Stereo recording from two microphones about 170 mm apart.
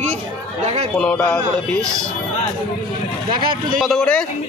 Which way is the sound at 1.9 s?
20° right (ahead or behind).